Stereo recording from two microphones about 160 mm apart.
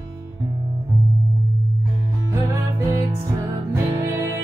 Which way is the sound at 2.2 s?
20° right (ahead or behind).